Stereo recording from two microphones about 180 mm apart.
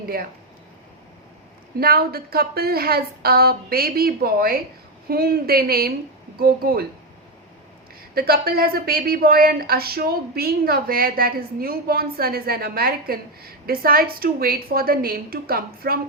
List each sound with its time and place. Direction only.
0.0 s speech: 55° right (ahead or behind)
1.8 s a woman's voice: 55° right (ahead or behind)
8.1 s a woman's voice: 55° right (ahead or behind)